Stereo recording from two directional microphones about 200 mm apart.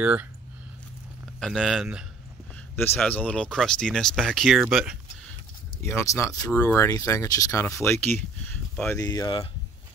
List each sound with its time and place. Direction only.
0.0 s speech: 5° right (ahead or behind)
1.4 s speech: centre (ahead or behind)
2.7 s speech: 10° left (ahead or behind)
5.8 s speech: 15° left (ahead or behind)